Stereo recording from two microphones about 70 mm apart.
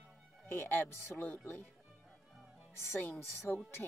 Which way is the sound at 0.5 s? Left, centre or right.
Left.